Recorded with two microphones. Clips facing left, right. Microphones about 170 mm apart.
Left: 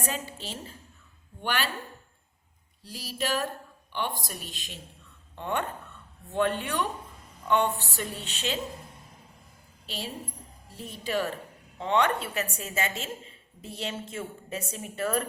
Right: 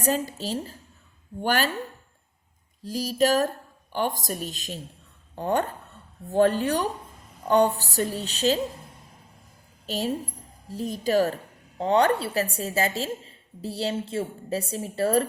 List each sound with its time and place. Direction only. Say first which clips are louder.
0.0 s a woman's voice: right 9 dB; 40° right (ahead or behind)
2.8 s a woman's voice: right 10 dB; 40° right (ahead or behind)
9.8 s a woman's voice: right 9 dB; 45° right (ahead or behind)